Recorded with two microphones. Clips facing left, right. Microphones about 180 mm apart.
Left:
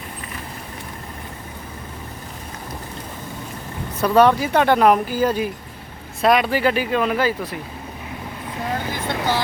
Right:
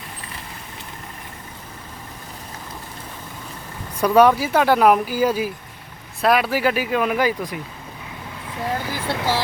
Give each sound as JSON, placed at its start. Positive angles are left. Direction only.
{"t": 4.0, "sound": "speech", "side_deg": -10}
{"t": 8.9, "sound": "speech", "side_deg": -5}